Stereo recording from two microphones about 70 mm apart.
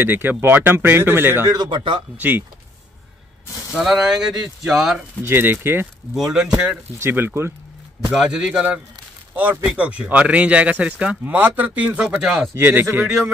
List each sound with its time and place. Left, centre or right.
0.0 s speech: right
3.7 s speech: centre
5.2 s speech: right
6.1 s speech: centre
7.0 s speech: right
8.1 s speech: centre
12.5 s speech: right